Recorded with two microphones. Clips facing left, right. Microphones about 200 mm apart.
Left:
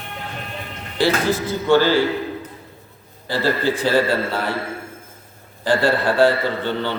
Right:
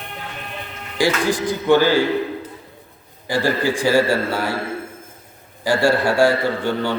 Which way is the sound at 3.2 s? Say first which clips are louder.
Right 1 dB; 15° right (ahead or behind).